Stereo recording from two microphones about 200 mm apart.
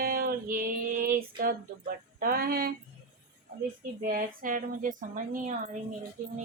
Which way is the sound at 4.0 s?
45° right (ahead or behind).